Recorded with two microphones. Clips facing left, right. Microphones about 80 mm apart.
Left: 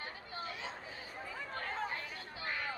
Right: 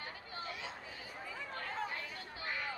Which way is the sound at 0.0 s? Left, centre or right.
Left.